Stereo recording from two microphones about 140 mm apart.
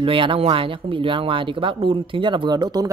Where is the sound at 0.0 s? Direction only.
40° right (ahead or behind).